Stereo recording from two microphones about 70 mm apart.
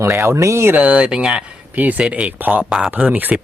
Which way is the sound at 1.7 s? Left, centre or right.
Right.